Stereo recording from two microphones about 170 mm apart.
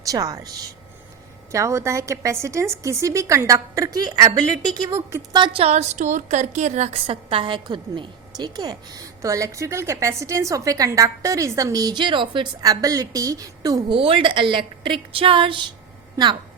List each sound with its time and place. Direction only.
0.1 s a woman's voice: 20° right (ahead or behind)
1.5 s a woman's voice: 15° right (ahead or behind)
13.9 s a woman's voice: 30° right (ahead or behind)